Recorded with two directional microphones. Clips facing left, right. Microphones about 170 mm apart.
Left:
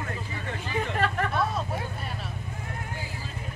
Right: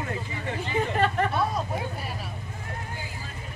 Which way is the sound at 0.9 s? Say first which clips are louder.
Right 2 dB; centre (ahead or behind).